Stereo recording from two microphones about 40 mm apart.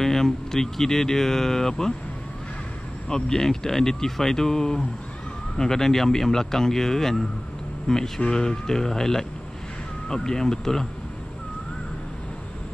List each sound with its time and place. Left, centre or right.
0.0 s speech: centre
3.1 s speech: centre